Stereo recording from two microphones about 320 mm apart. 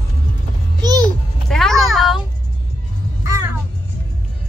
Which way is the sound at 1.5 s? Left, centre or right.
Centre.